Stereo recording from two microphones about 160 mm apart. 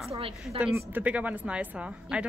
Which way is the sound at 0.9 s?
10° right (ahead or behind).